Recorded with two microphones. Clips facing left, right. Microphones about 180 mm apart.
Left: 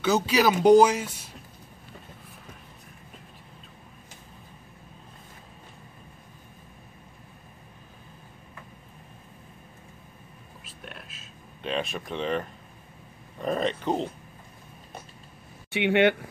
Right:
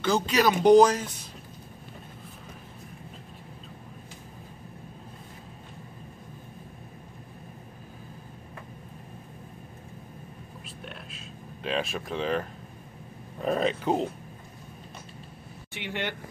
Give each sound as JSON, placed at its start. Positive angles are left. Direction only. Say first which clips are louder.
{"t": 0.0, "sound": "speech", "louder": "left 1 dB", "side_deg": 5}
{"t": 10.6, "sound": "a sound", "louder": "right 1 dB", "side_deg": 0}
{"t": 13.4, "sound": "speech", "louder": "right 1 dB", "side_deg": -5}
{"t": 15.7, "sound": "speech", "louder": "left 13 dB", "side_deg": 70}